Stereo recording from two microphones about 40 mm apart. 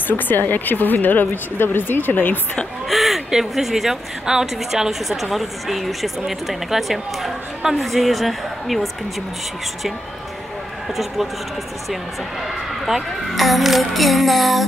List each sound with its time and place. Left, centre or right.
0.3 s speech: left
2.9 s a sound: centre
3.3 s a woman's voice: centre
5.1 s speech: centre
12.8 s speech: centre